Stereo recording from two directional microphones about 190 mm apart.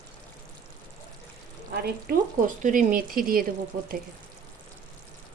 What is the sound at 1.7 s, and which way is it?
Speech, 55° right (ahead or behind).